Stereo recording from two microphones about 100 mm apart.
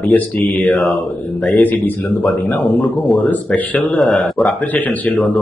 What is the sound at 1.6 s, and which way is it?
Speech, 20° left (ahead or behind).